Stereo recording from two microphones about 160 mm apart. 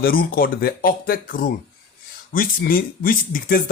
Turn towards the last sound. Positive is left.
turn(degrees=60)  # may be behind; listen again after turning